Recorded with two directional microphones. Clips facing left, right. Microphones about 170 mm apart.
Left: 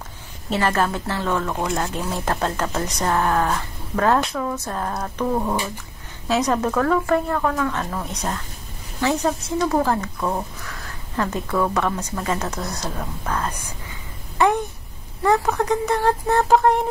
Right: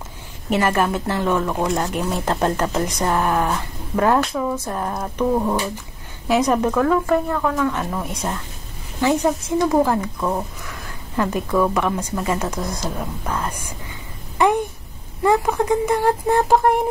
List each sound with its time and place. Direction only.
0.5 s a woman's voice: 15° right (ahead or behind)
6.2 s speech: 15° right (ahead or behind)
11.1 s speech: 15° right (ahead or behind)
15.2 s speech: 10° right (ahead or behind)